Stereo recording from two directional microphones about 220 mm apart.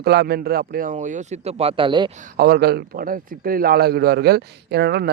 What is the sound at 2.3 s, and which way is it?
A man's voice, 45° right (ahead or behind).